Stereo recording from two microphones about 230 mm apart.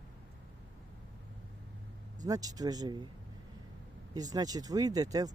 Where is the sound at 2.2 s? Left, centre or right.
Centre.